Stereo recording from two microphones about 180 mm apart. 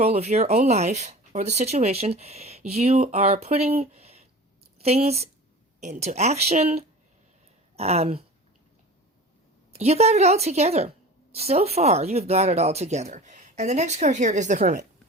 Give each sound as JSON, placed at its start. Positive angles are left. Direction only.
{"t": 0.0, "sound": "a woman's voice", "side_deg": -35}
{"t": 7.8, "sound": "a woman's voice", "side_deg": -35}
{"t": 9.7, "sound": "a woman's voice", "side_deg": -35}